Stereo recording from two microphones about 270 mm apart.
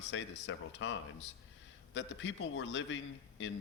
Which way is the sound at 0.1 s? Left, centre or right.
Left.